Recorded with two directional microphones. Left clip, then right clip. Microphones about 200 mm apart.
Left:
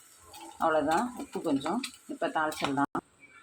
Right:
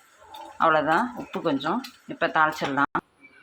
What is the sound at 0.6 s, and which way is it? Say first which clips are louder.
Speech: right 7 dB; 10° right (ahead or behind).